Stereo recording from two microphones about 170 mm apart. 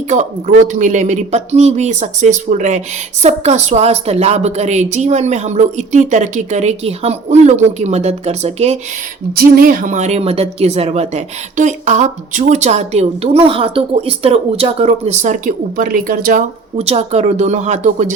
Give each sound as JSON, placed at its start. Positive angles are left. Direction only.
{"t": 0.1, "sound": "speech", "side_deg": -45}
{"t": 9.3, "sound": "speech", "side_deg": -60}
{"t": 16.7, "sound": "speech", "side_deg": -40}